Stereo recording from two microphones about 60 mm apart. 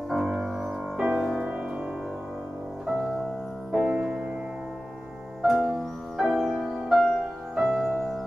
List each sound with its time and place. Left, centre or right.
0.1 s music: centre
1.4 s music: right
3.7 s music: centre
5.4 s music: centre